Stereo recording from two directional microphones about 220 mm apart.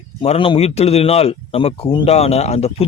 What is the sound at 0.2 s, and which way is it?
Speech, 25° left (ahead or behind).